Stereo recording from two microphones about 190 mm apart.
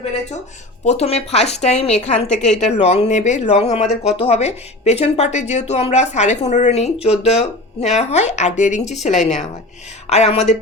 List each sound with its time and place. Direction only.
0.9 s a woman's voice: 35° left (ahead or behind)